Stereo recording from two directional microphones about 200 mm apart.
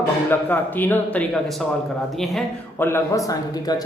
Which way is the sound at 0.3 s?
10° left (ahead or behind).